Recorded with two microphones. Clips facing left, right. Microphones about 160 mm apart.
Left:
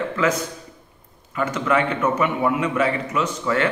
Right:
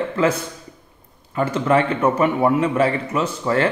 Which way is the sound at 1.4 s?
30° right (ahead or behind).